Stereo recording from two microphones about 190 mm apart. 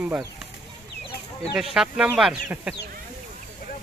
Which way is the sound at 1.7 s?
5° right (ahead or behind).